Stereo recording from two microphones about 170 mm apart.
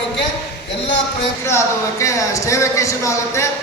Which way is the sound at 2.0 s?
20° left (ahead or behind).